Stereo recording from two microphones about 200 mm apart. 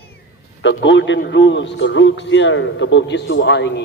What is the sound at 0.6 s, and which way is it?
A man's voice, 65° left (ahead or behind).